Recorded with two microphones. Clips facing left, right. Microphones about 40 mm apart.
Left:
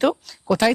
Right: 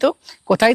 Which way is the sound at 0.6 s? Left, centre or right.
Right.